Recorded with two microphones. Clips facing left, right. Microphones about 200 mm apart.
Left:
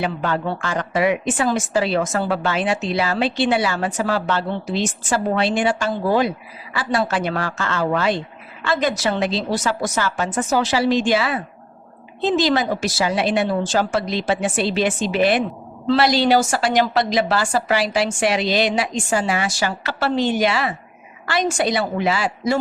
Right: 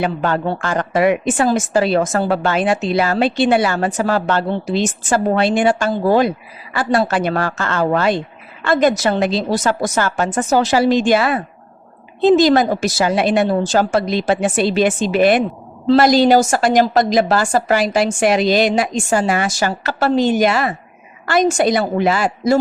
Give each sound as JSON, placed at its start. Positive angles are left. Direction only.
{"t": 0.0, "sound": "a woman's voice", "side_deg": -50}